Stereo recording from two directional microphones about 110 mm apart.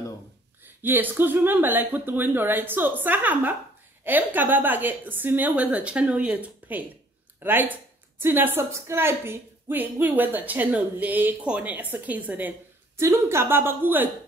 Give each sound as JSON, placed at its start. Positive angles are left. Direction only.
{"t": 0.8, "sound": "a woman's voice", "side_deg": -15}